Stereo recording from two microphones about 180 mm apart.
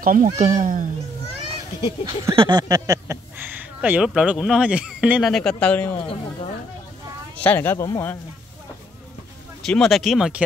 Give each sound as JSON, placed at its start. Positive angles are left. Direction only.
{"t": 0.0, "sound": "speech", "side_deg": -45}
{"t": 1.9, "sound": "a sound", "side_deg": -15}
{"t": 2.3, "sound": "speech", "side_deg": -25}
{"t": 5.9, "sound": "speech", "side_deg": 30}
{"t": 7.3, "sound": "speech", "side_deg": 10}
{"t": 9.6, "sound": "speech", "side_deg": 0}